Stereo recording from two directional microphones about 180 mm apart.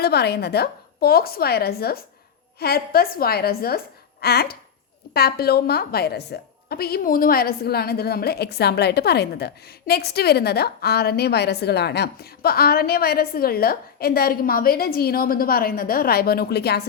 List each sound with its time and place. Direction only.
0.0 s a woman's voice: 65° left (ahead or behind)